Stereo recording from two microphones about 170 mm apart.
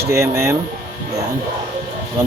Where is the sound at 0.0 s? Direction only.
15° right (ahead or behind).